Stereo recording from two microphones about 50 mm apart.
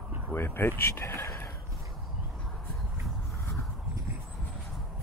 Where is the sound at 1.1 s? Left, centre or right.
Left.